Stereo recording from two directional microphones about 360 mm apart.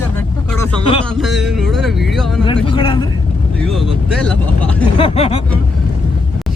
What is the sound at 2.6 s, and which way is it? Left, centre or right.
Speech, centre.